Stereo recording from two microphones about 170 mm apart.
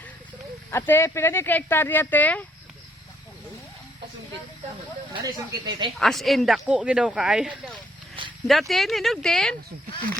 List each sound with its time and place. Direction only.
0.7 s speech: 15° left (ahead or behind)
5.2 s speech: 25° right (ahead or behind)
6.0 s speech: centre (ahead or behind)